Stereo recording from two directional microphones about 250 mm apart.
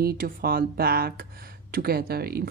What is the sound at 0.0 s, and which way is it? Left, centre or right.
Speech, right.